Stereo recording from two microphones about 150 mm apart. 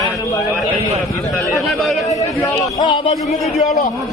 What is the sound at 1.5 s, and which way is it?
Speech, centre (ahead or behind).